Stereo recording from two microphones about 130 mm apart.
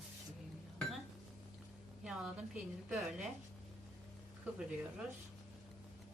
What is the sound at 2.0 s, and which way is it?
A woman's voice, 5° right (ahead or behind).